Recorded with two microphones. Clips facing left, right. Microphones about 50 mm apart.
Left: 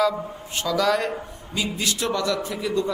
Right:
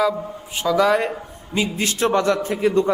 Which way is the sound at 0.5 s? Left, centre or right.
Centre.